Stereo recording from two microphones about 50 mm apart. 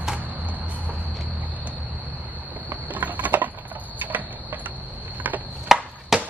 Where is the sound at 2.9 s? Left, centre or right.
Right.